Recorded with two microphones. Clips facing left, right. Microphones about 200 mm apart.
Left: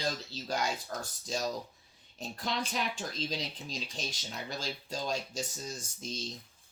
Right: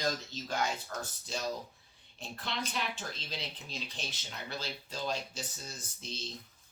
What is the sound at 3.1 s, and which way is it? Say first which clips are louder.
Speech: left 6 dB; 40° left (ahead or behind).